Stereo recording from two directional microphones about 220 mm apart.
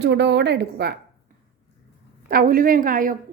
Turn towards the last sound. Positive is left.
turn(degrees=-40)  # may be behind; listen again after turning